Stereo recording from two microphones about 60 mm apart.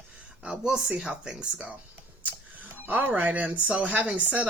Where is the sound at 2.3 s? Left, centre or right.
Right.